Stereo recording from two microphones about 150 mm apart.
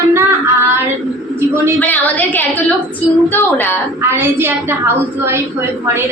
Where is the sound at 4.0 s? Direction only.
15° right (ahead or behind).